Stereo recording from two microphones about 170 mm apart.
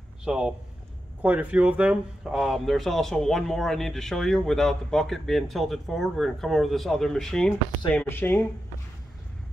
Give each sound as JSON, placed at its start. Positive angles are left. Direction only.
{"t": 0.2, "sound": "speech", "side_deg": -5}